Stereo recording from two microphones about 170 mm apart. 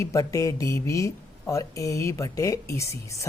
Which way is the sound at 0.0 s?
20° left (ahead or behind).